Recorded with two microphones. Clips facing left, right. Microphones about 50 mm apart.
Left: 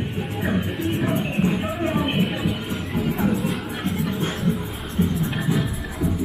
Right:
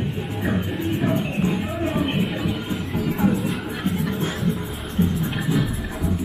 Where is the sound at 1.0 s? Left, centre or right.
Centre.